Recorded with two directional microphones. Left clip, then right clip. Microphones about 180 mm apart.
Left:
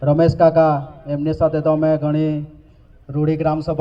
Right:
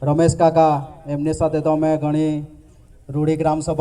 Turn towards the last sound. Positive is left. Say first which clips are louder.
# even
turn(degrees=-35)  # may be behind; listen again after turning